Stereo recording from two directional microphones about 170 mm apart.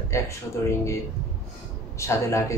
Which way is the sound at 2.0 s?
15° left (ahead or behind).